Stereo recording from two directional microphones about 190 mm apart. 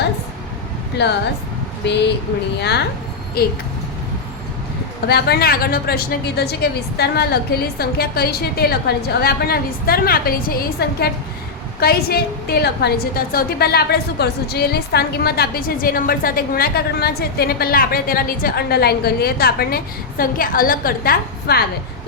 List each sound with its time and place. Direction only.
1.0 s a woman's voice: 65° left (ahead or behind)
5.0 s a woman's voice: 55° left (ahead or behind)